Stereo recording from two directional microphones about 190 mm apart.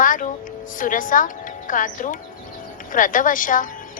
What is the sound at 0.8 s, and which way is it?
A woman's voice, 45° left (ahead or behind).